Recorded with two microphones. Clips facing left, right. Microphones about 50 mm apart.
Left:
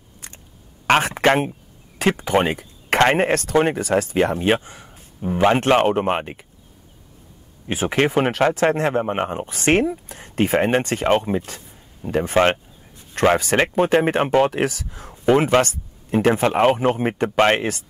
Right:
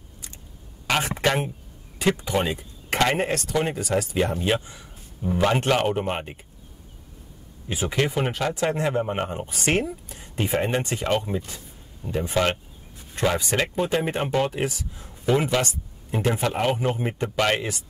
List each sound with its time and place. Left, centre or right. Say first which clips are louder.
0.2 s a sound: left 4 dB; left
0.8 s speech: left 7 dB; left
4.8 s a sound: left 2 dB; left
5.6 s speech: left 6 dB; left
7.6 s speech: left 5 dB; left
9.0 s speech: left 4 dB; left
15.2 s speech: left 6 dB; left